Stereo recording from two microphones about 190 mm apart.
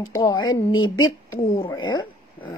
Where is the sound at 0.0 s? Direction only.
20° left (ahead or behind).